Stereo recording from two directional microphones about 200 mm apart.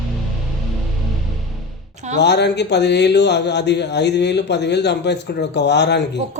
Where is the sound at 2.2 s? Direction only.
60° left (ahead or behind).